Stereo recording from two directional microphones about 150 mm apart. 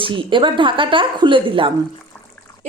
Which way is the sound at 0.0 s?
35° right (ahead or behind).